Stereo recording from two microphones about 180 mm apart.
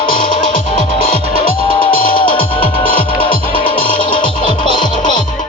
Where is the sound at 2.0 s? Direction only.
50° left (ahead or behind).